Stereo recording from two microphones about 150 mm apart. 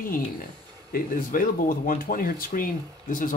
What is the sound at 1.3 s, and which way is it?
Speech, 65° left (ahead or behind).